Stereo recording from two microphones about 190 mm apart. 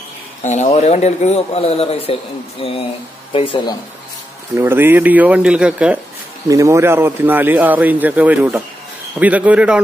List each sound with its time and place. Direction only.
0.4 s speech: 35° left (ahead or behind)
4.6 s a man's voice: 10° right (ahead or behind)
6.4 s a man's voice: 15° right (ahead or behind)